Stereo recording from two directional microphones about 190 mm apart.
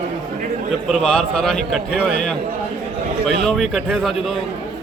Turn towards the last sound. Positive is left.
turn(degrees=0)  # may be behind; listen again after turning